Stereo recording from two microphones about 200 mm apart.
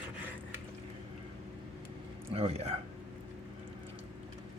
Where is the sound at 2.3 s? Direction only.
30° right (ahead or behind).